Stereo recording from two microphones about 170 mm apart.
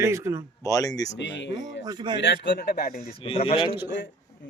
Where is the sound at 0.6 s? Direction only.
20° left (ahead or behind).